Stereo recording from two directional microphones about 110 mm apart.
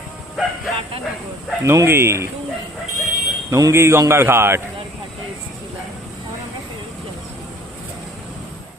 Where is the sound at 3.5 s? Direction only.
25° right (ahead or behind).